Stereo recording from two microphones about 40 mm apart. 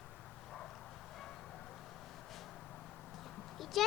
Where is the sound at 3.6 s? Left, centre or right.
Centre.